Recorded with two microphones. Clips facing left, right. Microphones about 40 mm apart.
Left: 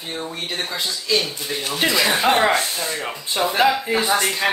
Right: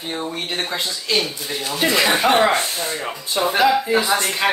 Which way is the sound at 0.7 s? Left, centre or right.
Right.